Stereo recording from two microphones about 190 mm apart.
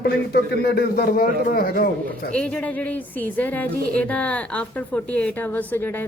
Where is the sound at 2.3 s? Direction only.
5° left (ahead or behind).